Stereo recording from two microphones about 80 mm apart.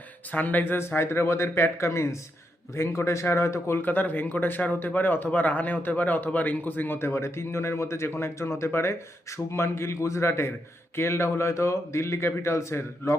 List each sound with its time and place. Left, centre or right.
0.3 s speech: left
3.8 s speech: left